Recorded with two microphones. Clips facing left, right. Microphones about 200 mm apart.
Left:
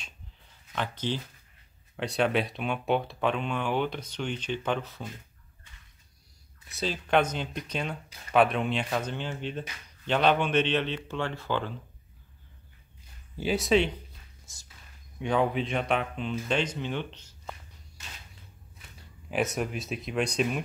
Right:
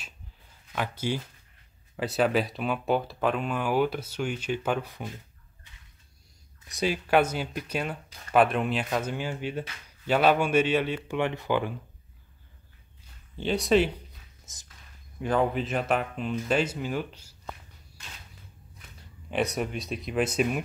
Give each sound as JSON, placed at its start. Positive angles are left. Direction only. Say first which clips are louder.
{"t": 0.7, "sound": "speech", "louder": "right 2 dB", "side_deg": -10}
{"t": 6.7, "sound": "speech", "louder": "right 2 dB", "side_deg": -10}
{"t": 13.4, "sound": "speech", "louder": "right 1 dB", "side_deg": 5}
{"t": 14.4, "sound": "a sound", "louder": "right 1 dB", "side_deg": -20}
{"t": 15.1, "sound": "speech", "louder": "right 1 dB", "side_deg": 0}
{"t": 19.3, "sound": "speech", "louder": "right 1 dB", "side_deg": 0}